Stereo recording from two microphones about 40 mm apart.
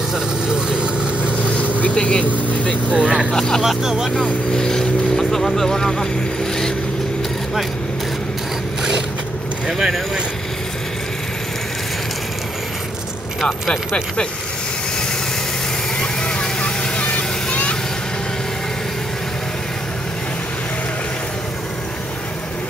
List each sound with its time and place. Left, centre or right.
0.1 s vehicle: centre
1.8 s vehicle: left
2.9 s speech: right
3.3 s speech: centre
3.6 s speech: centre
4.1 s speech: centre
9.7 s speech: centre
16.2 s vehicle: left